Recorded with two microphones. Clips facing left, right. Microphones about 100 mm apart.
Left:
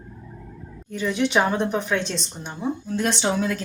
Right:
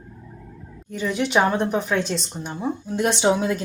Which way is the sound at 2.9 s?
15° right (ahead or behind).